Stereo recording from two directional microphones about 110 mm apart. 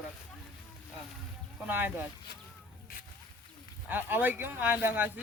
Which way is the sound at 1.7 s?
15° right (ahead or behind).